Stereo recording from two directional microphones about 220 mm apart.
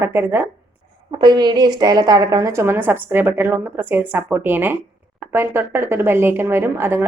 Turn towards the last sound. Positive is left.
turn(degrees=-10)  # may be behind; listen again after turning